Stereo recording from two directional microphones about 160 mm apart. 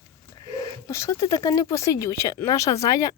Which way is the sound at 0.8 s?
20° left (ahead or behind).